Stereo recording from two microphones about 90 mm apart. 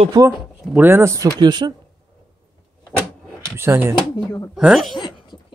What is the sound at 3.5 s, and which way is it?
Speech, 25° right (ahead or behind).